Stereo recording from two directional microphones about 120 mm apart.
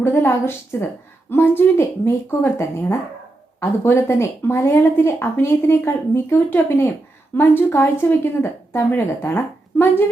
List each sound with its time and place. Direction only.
0.0 s speech: 20° left (ahead or behind)